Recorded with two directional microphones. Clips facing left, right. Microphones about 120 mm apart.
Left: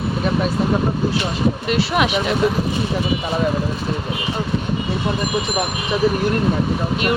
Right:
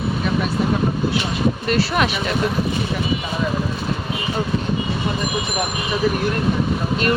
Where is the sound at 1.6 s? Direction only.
15° left (ahead or behind).